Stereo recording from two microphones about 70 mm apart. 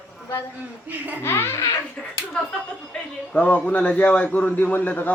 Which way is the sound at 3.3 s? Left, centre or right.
Centre.